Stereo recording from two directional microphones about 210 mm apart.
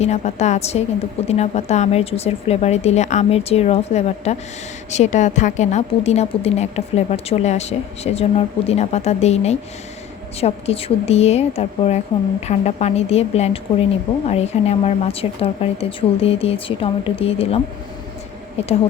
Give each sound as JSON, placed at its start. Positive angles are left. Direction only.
{"t": 0.0, "sound": "a woman's voice", "side_deg": 30}